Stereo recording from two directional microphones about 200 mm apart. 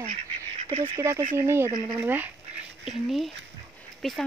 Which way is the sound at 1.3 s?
15° right (ahead or behind).